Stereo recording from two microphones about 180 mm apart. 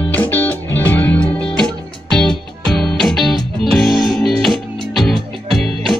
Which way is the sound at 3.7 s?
Centre (ahead or behind).